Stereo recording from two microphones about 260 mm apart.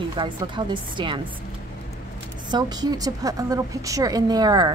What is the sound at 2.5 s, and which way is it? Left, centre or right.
A woman's voice, centre.